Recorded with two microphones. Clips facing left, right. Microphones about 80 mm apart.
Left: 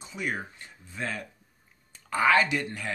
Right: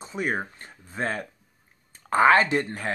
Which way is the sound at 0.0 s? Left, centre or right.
Right.